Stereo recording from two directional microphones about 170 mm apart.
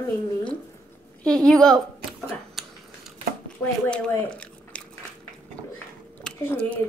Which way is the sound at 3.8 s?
10° left (ahead or behind).